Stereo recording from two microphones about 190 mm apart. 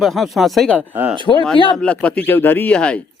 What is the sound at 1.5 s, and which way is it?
Speech, 25° left (ahead or behind).